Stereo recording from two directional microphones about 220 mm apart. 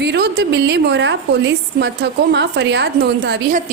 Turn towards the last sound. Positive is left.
turn(degrees=-35)  # may be behind; listen again after turning